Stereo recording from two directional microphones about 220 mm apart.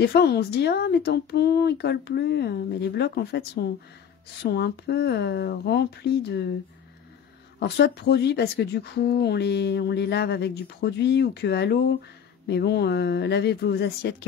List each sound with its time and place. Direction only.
0.0 s speech: 50° left (ahead or behind)
7.5 s speech: 50° left (ahead or behind)